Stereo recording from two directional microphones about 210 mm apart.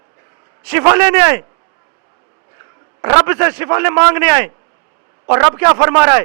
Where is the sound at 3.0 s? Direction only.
10° right (ahead or behind).